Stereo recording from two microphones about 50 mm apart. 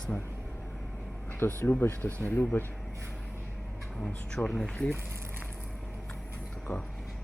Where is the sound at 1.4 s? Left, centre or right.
Left.